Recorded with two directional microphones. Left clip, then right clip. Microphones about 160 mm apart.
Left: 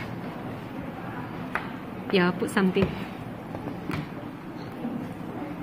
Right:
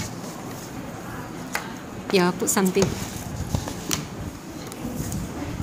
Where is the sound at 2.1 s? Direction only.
35° right (ahead or behind).